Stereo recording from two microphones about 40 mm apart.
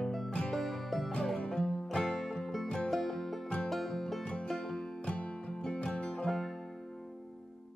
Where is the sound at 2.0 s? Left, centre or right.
Centre.